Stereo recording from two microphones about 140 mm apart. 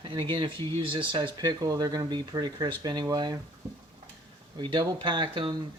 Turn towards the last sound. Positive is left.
turn(degrees=-35)  # may be behind; listen again after turning